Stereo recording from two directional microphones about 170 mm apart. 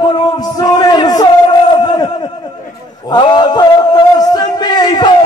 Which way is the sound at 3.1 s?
25° left (ahead or behind).